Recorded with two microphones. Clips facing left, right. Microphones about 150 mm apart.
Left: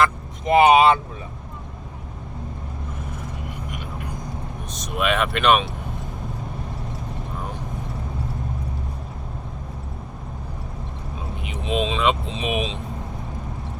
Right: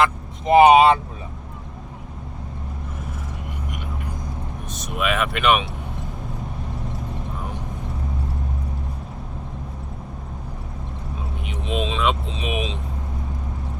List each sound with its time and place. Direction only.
0.0 s speech: 30° right (ahead or behind)
4.7 s speech: 5° right (ahead or behind)
11.4 s speech: centre (ahead or behind)